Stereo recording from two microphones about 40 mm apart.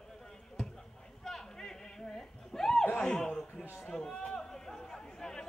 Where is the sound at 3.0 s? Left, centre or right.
Centre.